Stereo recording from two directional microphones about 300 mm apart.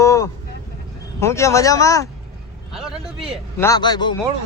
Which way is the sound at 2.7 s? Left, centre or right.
Centre.